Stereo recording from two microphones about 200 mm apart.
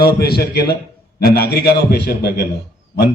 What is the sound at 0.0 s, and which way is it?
A man's voice, 50° left (ahead or behind).